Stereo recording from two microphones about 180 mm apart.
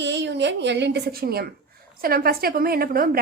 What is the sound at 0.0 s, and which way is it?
A woman's voice, 75° right (ahead or behind).